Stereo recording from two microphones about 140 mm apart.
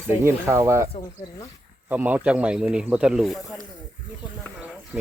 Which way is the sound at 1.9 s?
10° right (ahead or behind).